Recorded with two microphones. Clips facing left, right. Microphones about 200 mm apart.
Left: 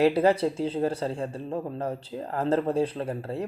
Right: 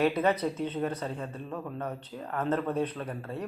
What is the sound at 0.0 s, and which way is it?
Speech, 30° left (ahead or behind).